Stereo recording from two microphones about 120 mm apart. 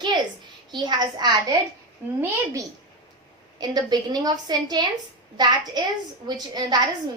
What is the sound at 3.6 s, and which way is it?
A woman's voice, 35° right (ahead or behind).